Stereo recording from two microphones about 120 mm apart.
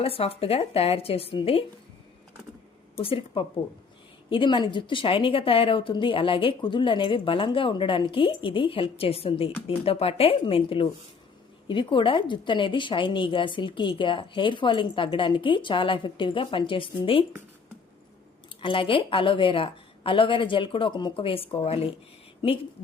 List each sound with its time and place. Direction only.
0.0 s speech: 55° left (ahead or behind)
3.0 s a woman's voice: 50° left (ahead or behind)
18.6 s a woman's voice: 45° left (ahead or behind)